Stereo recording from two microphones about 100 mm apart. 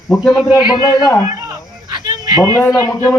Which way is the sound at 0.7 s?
40° left (ahead or behind).